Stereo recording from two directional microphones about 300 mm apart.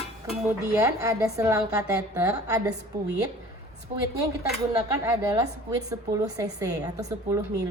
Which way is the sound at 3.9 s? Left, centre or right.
Right.